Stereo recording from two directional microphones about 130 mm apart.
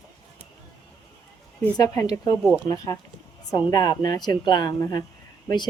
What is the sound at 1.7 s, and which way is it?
Speech, 25° left (ahead or behind).